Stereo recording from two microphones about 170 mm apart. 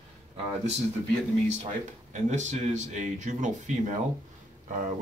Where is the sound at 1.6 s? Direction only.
45° right (ahead or behind).